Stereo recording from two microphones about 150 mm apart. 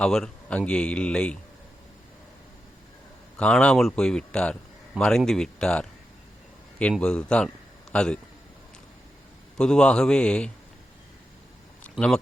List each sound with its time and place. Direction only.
0.0 s speech: 5° left (ahead or behind)
3.3 s speech: 5° left (ahead or behind)
7.0 s speech: 5° left (ahead or behind)
9.6 s speech: 5° left (ahead or behind)
11.8 s a sound: 5° left (ahead or behind)